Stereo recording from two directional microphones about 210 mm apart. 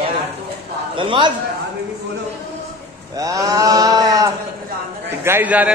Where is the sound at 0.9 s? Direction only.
25° right (ahead or behind).